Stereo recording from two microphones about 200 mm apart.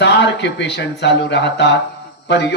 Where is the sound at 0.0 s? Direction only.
60° left (ahead or behind).